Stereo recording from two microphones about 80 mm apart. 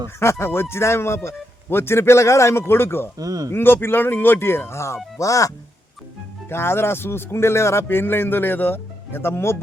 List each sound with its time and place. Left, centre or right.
0.2 s speech: left
3.2 s speech: right
3.5 s a man's voice: left
6.5 s a man's voice: left